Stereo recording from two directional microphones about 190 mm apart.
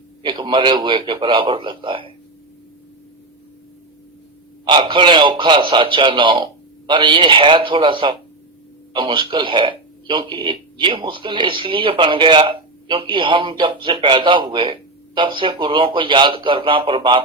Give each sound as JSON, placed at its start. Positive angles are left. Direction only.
{"t": 0.2, "sound": "speech", "side_deg": -25}
{"t": 4.6, "sound": "speech", "side_deg": -25}